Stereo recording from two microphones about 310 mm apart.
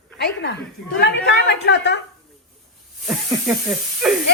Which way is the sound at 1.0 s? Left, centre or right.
Left.